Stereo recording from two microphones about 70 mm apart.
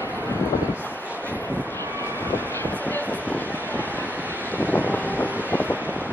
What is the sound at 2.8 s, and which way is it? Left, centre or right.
Vehicle, left.